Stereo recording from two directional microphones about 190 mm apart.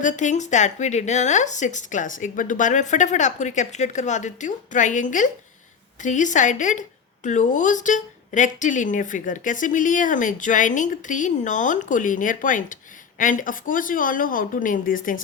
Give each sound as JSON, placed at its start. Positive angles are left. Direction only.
{"t": 0.0, "sound": "a woman's voice", "side_deg": 40}